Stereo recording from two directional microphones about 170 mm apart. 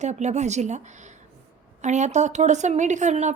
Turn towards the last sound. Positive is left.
turn(degrees=-45)  # may be behind; listen again after turning